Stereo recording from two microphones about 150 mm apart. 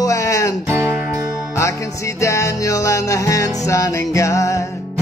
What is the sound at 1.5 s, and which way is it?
Music, 20° left (ahead or behind).